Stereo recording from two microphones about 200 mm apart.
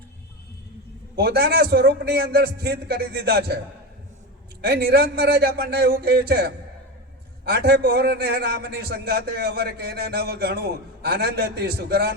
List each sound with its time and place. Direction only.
1.1 s a man's voice: 55° right (ahead or behind)
4.6 s a man's voice: 50° right (ahead or behind)